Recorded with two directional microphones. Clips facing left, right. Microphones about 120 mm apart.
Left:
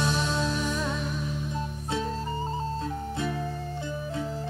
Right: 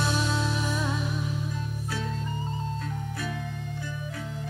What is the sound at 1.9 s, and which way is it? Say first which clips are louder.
Music: left 4 dB; 25° left (ahead or behind).